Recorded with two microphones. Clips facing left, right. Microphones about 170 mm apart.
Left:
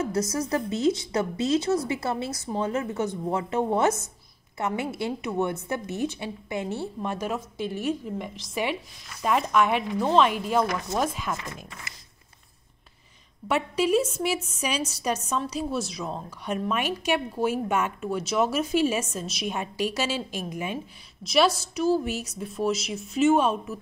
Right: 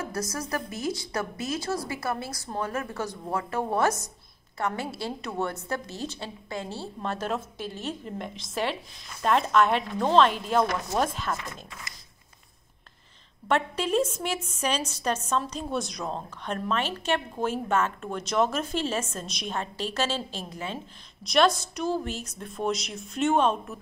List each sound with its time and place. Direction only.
0.0 s a woman's voice: 25° left (ahead or behind); by 11.9 s 10° left (ahead or behind)
13.5 s a woman's voice: 10° left (ahead or behind)
21.2 s a woman's voice: 5° left (ahead or behind)